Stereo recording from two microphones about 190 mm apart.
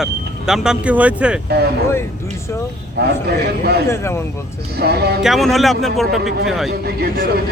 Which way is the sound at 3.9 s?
15° left (ahead or behind).